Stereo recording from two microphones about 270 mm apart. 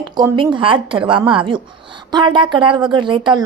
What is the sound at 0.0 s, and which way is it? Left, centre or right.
A woman's voice, centre.